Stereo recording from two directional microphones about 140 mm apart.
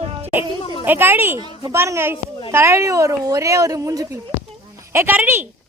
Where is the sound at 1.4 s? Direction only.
30° right (ahead or behind).